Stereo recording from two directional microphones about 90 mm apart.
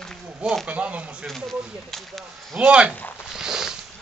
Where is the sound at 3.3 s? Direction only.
5° right (ahead or behind).